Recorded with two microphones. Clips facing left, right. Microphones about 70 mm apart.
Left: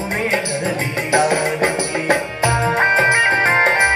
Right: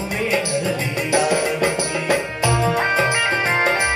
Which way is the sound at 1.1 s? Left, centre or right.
Left.